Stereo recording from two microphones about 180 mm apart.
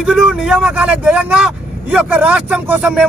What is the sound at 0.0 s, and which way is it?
Speech, centre (ahead or behind).